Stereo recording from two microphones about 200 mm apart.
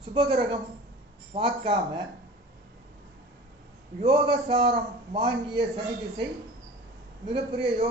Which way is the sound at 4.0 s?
30° right (ahead or behind).